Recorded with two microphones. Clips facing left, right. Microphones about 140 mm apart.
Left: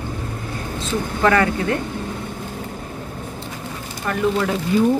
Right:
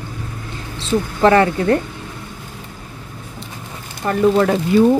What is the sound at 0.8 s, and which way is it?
Speech, 30° right (ahead or behind).